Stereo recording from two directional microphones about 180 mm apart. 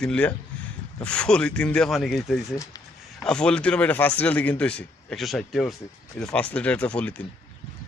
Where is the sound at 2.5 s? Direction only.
15° left (ahead or behind).